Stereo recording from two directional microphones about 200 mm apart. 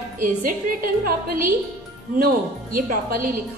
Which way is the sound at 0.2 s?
45° right (ahead or behind).